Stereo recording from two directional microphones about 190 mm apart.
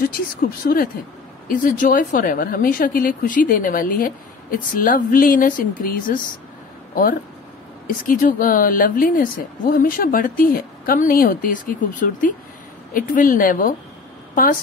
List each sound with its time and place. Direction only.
0.4 s a woman's voice: 50° left (ahead or behind)
7.8 s a woman's voice: 45° left (ahead or behind)